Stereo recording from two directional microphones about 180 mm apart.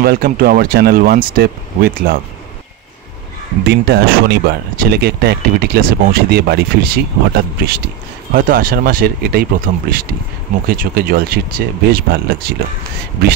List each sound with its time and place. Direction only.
0.0 s speech: 55° right (ahead or behind)
3.6 s speech: 65° right (ahead or behind)